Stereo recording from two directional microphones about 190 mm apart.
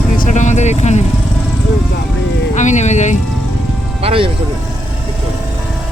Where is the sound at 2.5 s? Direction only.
40° left (ahead or behind).